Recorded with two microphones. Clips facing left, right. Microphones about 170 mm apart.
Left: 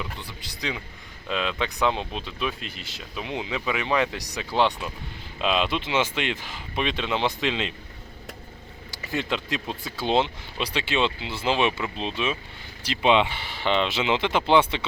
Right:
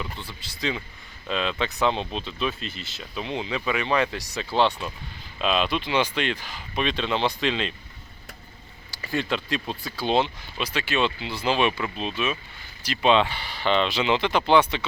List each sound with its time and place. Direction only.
0.0 s speech: 15° left (ahead or behind)
8.9 s speech: 20° left (ahead or behind)